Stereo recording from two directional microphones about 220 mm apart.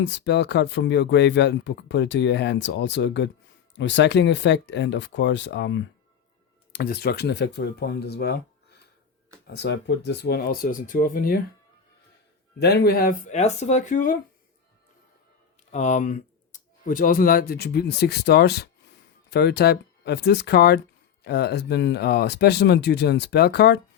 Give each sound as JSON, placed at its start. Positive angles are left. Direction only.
{"t": 0.0, "sound": "speech", "side_deg": 50}
{"t": 9.6, "sound": "speech", "side_deg": 50}
{"t": 12.5, "sound": "speech", "side_deg": 45}
{"t": 15.7, "sound": "speech", "side_deg": 35}